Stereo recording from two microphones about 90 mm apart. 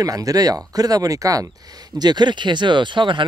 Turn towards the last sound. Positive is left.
turn(degrees=-60)  # may be behind; listen again after turning